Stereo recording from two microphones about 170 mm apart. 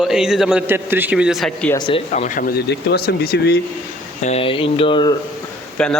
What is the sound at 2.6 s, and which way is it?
Speech, 75° left (ahead or behind).